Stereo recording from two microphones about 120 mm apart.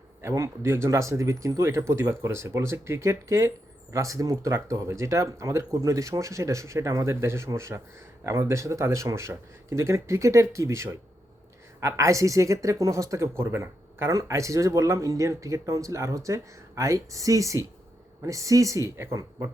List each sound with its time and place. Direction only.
0.2 s speech: 25° right (ahead or behind)